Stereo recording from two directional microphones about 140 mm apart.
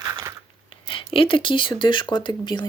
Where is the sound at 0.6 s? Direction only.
40° left (ahead or behind).